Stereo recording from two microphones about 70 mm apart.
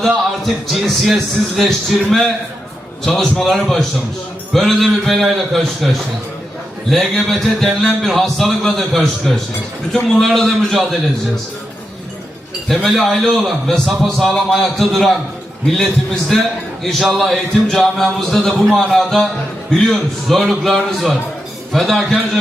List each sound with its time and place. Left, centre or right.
0.1 s a man's voice: centre
12.6 s a man's voice: centre
16.3 s a man's voice: centre